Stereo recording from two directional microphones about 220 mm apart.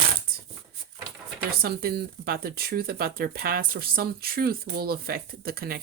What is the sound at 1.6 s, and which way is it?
Speech, 45° right (ahead or behind).